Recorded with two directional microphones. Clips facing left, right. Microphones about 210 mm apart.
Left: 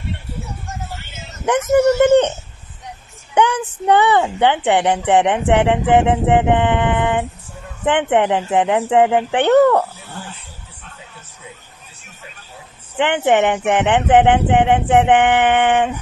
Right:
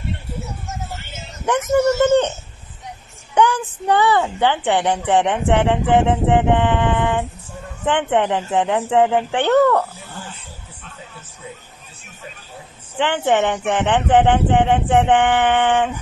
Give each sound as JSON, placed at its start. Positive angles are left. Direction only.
{"t": 3.3, "sound": "speech", "side_deg": 20}
{"t": 12.9, "sound": "speech", "side_deg": 20}